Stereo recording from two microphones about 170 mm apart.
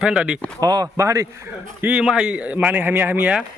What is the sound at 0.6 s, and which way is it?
A man's voice, 20° right (ahead or behind).